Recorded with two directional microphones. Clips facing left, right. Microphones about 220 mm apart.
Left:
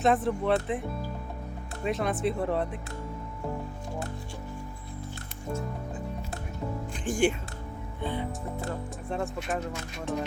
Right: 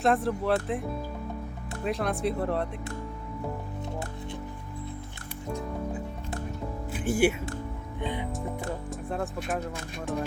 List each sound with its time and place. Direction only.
0.0 s speech: centre (ahead or behind)
6.9 s speech: 5° right (ahead or behind)
9.0 s speech: centre (ahead or behind)